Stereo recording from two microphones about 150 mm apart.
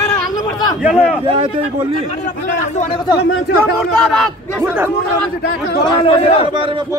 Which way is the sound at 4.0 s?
5° left (ahead or behind).